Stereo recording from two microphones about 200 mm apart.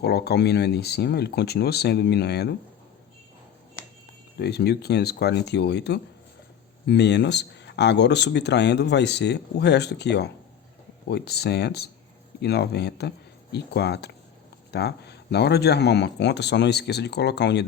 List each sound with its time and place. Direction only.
0.0 s speech: 55° left (ahead or behind)
4.4 s speech: 55° left (ahead or behind)